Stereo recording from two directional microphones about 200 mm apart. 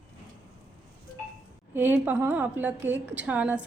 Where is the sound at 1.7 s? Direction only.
10° right (ahead or behind).